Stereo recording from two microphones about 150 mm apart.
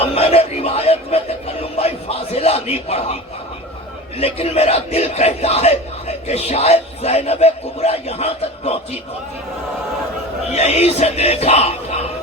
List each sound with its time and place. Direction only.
0.0 s a man's voice: 40° left (ahead or behind)
4.2 s a man's voice: 40° left (ahead or behind)
10.5 s a man's voice: 45° left (ahead or behind)